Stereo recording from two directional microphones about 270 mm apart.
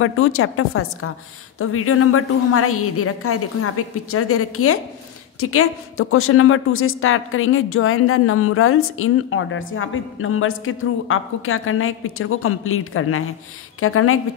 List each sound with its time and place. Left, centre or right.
0.0 s a woman's voice: left